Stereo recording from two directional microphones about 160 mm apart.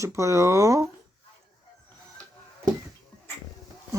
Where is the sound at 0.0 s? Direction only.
20° right (ahead or behind).